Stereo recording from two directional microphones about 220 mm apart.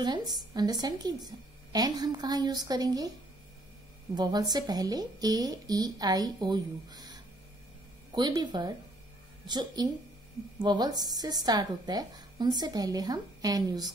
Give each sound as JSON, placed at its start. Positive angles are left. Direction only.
{"t": 0.0, "sound": "a woman's voice", "side_deg": -20}
{"t": 4.1, "sound": "a woman's voice", "side_deg": -20}